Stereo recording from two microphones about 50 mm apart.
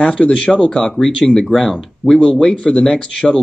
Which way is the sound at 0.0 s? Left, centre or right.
Centre.